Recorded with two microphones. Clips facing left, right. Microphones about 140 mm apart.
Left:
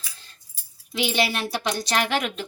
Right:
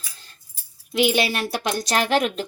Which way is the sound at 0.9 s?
55° right (ahead or behind).